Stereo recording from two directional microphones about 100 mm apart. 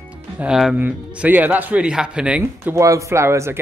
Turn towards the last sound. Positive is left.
turn(degrees=-25)  # may be behind; listen again after turning